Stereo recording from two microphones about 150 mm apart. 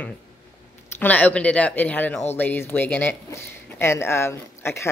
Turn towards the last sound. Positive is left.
turn(degrees=15)  # may be behind; listen again after turning